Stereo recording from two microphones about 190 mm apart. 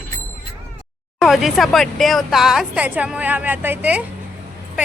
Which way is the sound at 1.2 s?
Centre (ahead or behind).